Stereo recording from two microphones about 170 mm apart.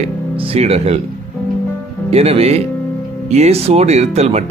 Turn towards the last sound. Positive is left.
turn(degrees=-40)  # may be behind; listen again after turning